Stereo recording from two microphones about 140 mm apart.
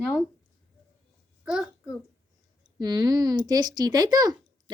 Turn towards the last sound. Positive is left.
turn(degrees=-30)  # may be behind; listen again after turning